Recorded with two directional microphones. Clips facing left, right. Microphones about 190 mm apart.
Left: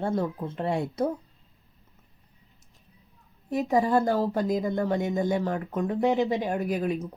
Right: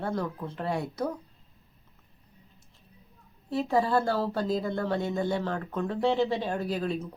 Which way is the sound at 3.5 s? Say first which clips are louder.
Left 2 dB; 20° left (ahead or behind).